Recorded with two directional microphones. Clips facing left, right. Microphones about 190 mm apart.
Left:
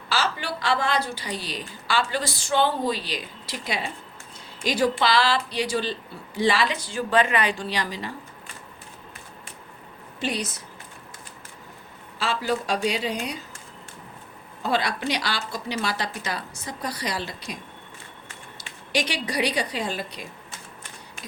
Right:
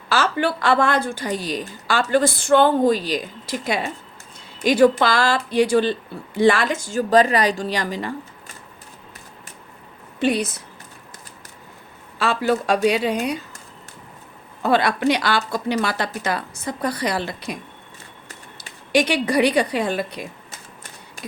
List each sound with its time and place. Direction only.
0.1 s a woman's voice: 55° right (ahead or behind)
10.2 s speech: 55° right (ahead or behind)
12.2 s speech: 55° right (ahead or behind)
14.6 s speech: 55° right (ahead or behind)
18.9 s speech: 55° right (ahead or behind)